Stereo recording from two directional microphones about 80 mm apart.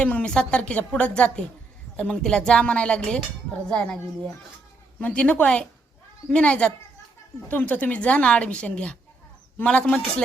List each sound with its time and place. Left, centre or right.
0.0 s a woman's voice: centre